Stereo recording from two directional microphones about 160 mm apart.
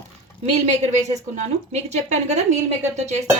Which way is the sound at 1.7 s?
45° right (ahead or behind).